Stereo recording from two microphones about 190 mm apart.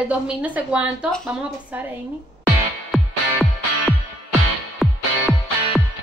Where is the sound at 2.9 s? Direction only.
Centre (ahead or behind).